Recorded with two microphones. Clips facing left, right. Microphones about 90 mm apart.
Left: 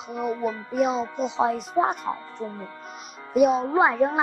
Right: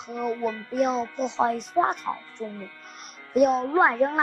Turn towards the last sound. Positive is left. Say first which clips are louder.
# left 1 dB
turn(degrees=0)  # may be behind; listen again after turning